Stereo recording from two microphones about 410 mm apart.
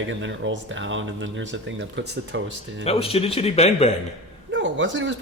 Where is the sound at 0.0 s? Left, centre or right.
Right.